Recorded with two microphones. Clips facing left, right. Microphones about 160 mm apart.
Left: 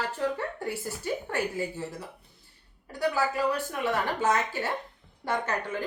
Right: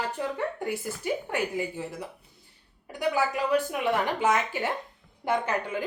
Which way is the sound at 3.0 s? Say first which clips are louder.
Even; 15° right (ahead or behind).